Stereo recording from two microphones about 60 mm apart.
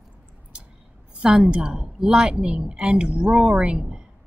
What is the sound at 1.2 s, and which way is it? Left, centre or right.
A woman's voice, centre.